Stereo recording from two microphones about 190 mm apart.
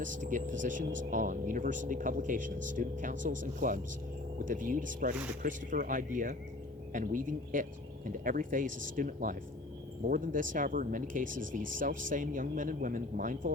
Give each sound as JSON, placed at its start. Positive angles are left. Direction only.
{"t": 0.0, "sound": "speech", "side_deg": -45}